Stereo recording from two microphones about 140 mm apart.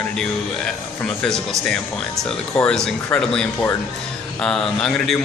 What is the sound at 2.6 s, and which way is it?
Speech, 5° left (ahead or behind).